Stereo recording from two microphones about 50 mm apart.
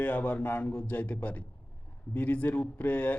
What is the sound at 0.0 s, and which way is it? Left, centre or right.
Speech, left.